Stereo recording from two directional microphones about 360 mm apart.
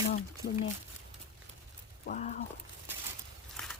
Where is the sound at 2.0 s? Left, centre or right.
Left.